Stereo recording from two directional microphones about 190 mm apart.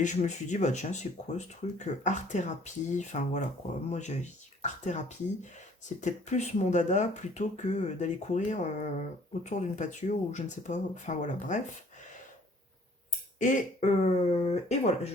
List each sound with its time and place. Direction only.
0.0 s speech: 40° left (ahead or behind)
13.4 s speech: 40° left (ahead or behind)